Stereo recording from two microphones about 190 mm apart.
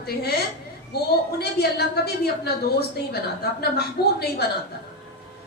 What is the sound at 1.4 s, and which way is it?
A woman's voice, 60° left (ahead or behind).